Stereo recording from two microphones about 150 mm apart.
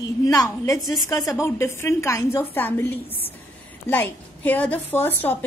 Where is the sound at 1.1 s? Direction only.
25° left (ahead or behind).